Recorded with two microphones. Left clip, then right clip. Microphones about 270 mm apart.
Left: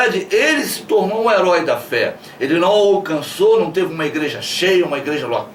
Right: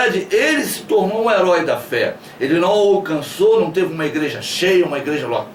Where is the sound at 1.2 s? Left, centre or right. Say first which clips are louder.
Left 1 dB; centre.